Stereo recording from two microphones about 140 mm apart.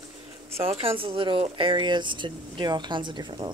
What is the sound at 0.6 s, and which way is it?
Speech, 45° right (ahead or behind).